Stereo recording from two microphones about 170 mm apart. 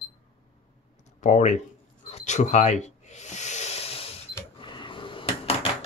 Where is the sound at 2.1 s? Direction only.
40° left (ahead or behind).